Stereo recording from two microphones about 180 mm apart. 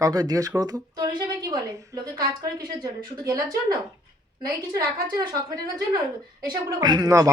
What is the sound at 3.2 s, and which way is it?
A man's voice, 20° right (ahead or behind).